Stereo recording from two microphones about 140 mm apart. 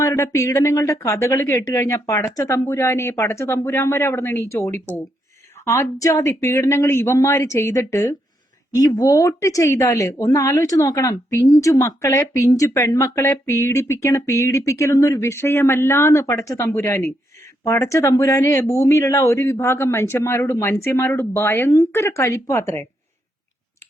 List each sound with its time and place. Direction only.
0.0 s speech: 20° left (ahead or behind)